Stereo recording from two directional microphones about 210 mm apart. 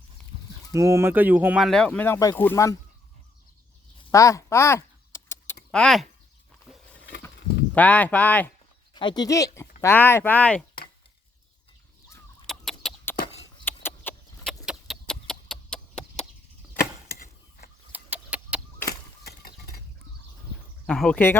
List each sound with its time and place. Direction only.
0.7 s speech: 15° right (ahead or behind); by 2.7 s 10° left (ahead or behind)
4.1 s keys jangling: 15° left (ahead or behind)
5.7 s speech: centre (ahead or behind)
7.8 s speech: 5° left (ahead or behind)
9.0 s speech: 20° left (ahead or behind)
12.5 s chicken: centre (ahead or behind)
13.7 s a sound: 10° left (ahead or behind)
14.6 s chicken: centre (ahead or behind)
17.1 s a sound: 45° left (ahead or behind)
17.9 s chicken: 5° right (ahead or behind)
18.9 s a sound: 50° left (ahead or behind)
20.8 s speech: 5° left (ahead or behind)